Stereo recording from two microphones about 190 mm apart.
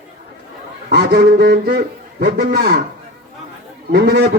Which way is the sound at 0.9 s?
60° right (ahead or behind).